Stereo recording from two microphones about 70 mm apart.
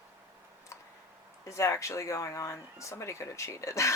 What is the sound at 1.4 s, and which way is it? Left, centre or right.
Speech, left.